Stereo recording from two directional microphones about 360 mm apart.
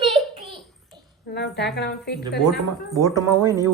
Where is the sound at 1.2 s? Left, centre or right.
Left.